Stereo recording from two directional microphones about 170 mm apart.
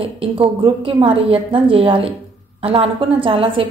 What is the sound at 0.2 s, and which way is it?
A woman's voice, 30° right (ahead or behind).